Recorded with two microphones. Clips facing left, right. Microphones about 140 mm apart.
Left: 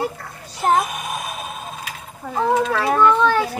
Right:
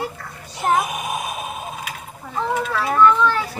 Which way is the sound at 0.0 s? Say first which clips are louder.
Left 3 dB; 40° left (ahead or behind).